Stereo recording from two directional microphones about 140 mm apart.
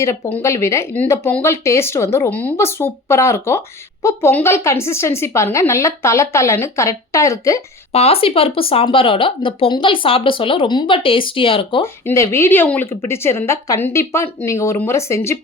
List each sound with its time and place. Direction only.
0.3 s speech: 20° left (ahead or behind)
7.9 s speech: 45° left (ahead or behind)
12.0 s speech: 20° left (ahead or behind)